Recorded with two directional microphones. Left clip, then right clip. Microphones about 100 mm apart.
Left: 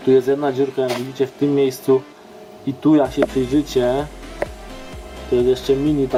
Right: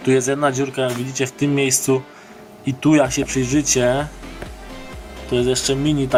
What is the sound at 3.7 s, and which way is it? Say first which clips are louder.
Speech: right 3 dB; 25° left (ahead or behind).